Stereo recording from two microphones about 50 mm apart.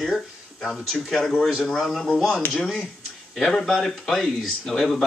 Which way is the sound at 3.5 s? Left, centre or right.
Centre.